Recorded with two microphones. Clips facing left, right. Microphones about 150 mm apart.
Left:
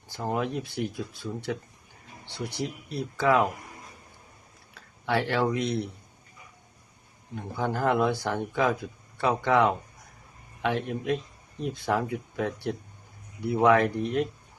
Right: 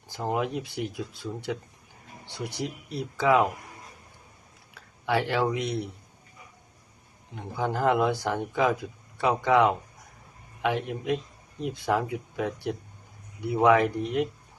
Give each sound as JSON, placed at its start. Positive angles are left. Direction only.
{"t": 0.1, "sound": "speech", "side_deg": -15}
{"t": 5.0, "sound": "speech", "side_deg": -15}
{"t": 7.3, "sound": "speech", "side_deg": -15}